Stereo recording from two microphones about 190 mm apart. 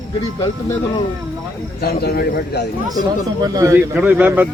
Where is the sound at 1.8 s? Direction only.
55° left (ahead or behind).